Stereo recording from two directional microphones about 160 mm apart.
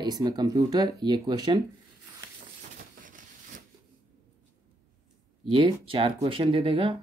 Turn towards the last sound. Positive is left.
turn(degrees=-35)  # may be behind; listen again after turning